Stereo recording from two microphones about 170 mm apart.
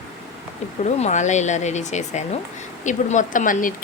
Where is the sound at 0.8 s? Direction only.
45° left (ahead or behind).